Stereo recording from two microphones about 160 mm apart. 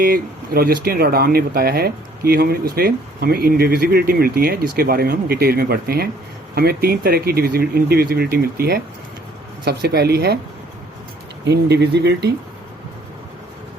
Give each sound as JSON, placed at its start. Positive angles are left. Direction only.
{"t": 0.0, "sound": "speech", "side_deg": -65}
{"t": 11.4, "sound": "speech", "side_deg": -90}